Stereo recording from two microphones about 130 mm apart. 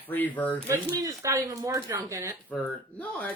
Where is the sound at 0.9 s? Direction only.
25° right (ahead or behind).